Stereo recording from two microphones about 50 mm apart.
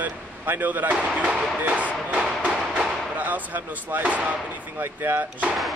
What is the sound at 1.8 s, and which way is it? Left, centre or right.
Thump, right.